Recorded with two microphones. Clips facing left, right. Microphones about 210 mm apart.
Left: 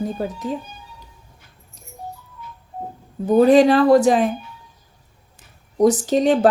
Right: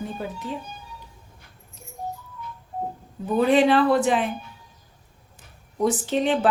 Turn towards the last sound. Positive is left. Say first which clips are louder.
# left 6 dB
turn(degrees=40)  # may be behind; listen again after turning